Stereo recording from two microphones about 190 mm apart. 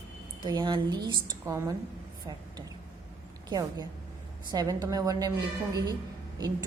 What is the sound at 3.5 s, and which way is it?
A woman's voice, 20° right (ahead or behind).